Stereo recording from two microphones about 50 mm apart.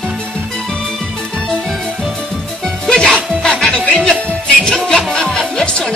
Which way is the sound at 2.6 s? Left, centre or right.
Centre.